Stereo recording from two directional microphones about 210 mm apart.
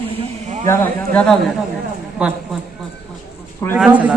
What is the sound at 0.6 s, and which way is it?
Speech, 10° left (ahead or behind).